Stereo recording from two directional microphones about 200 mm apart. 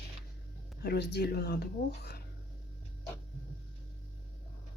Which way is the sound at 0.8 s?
55° left (ahead or behind).